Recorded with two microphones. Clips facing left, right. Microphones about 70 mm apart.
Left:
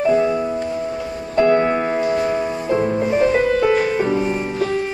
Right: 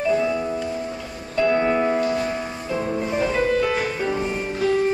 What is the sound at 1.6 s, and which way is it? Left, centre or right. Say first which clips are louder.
Music: left 2 dB; left.